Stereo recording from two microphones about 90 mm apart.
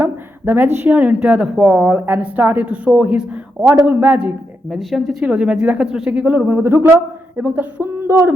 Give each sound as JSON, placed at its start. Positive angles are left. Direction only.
{"t": 0.0, "sound": "speech", "side_deg": -25}
{"t": 4.7, "sound": "speech", "side_deg": 0}
{"t": 5.2, "sound": "speech", "side_deg": -10}
{"t": 8.0, "sound": "a sound", "side_deg": -30}